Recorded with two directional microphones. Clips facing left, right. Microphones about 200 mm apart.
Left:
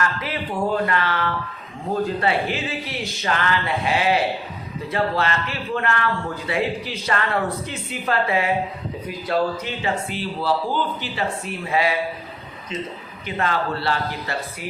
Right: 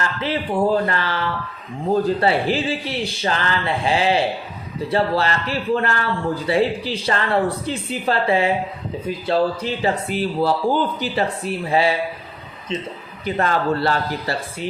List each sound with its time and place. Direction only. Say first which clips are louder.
0.0 s a man's voice: right 2 dB; 30° right (ahead or behind)
2.2 s a man's voice: right 4 dB; 30° right (ahead or behind)
13.2 s a man's voice: right 4 dB; 40° right (ahead or behind)